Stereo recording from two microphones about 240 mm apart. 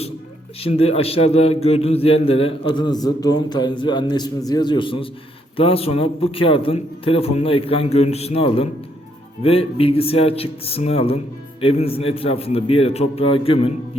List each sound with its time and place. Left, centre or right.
0.6 s a man's voice: left